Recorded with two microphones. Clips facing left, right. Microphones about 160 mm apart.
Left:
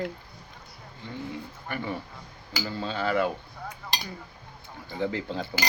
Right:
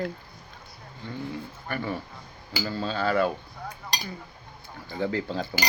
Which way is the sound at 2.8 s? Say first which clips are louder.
Right 2 dB; 20° left (ahead or behind).